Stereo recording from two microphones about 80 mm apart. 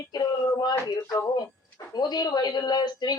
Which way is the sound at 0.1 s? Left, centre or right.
Left.